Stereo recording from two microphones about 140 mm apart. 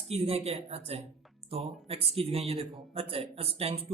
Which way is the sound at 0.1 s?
45° right (ahead or behind).